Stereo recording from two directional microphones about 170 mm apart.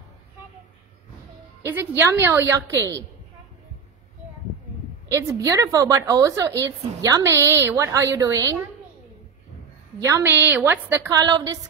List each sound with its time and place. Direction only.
1.7 s a woman's voice: 15° right (ahead or behind)
5.1 s a woman's voice: 20° right (ahead or behind)
9.9 s a woman's voice: 15° right (ahead or behind)